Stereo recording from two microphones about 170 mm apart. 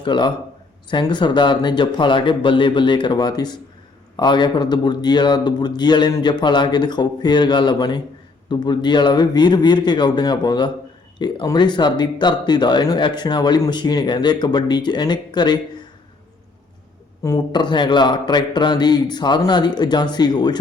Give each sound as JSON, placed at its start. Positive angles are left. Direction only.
{"t": 0.0, "sound": "speech", "side_deg": 25}
{"t": 17.2, "sound": "speech", "side_deg": 25}